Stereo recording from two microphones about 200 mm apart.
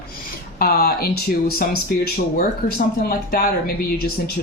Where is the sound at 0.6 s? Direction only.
50° left (ahead or behind).